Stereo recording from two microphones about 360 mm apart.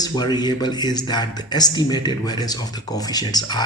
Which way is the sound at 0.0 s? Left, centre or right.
Centre.